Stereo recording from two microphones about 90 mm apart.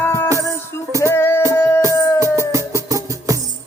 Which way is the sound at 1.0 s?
25° left (ahead or behind).